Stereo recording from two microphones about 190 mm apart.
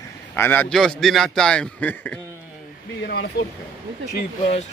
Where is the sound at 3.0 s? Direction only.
60° left (ahead or behind).